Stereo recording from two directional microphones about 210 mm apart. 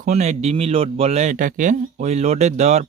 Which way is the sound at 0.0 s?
30° right (ahead or behind).